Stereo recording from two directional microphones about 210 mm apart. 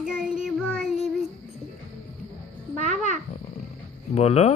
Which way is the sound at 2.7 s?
35° right (ahead or behind).